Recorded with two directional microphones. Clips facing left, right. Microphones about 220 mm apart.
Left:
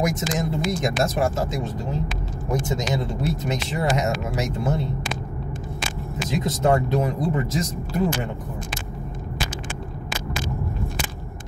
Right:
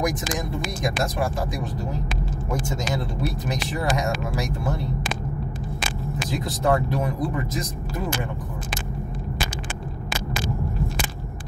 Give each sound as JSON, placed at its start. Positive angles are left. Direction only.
{"t": 0.0, "sound": "speech", "side_deg": 25}
{"t": 6.3, "sound": "speech", "side_deg": 20}